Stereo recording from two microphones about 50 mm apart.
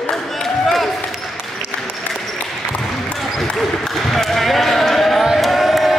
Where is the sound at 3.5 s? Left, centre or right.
Centre.